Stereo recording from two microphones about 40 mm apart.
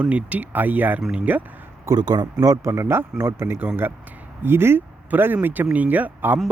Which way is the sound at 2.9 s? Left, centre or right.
Right.